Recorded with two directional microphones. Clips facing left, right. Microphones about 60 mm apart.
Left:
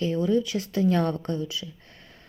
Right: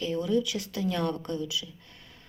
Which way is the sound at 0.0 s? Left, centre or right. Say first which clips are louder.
Left 3 dB; left.